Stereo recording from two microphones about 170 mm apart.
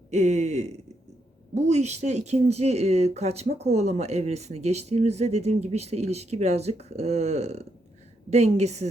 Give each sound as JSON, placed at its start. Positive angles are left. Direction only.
{"t": 0.1, "sound": "speech", "side_deg": -45}